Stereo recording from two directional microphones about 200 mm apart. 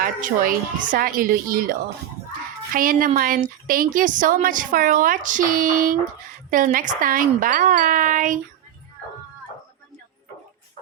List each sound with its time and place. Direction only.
0.0 s speech: 45° right (ahead or behind)